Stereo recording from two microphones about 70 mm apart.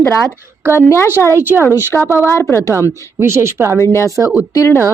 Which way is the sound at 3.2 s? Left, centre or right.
Right.